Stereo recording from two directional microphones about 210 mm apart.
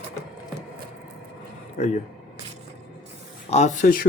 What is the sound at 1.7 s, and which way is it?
Speech, 30° left (ahead or behind).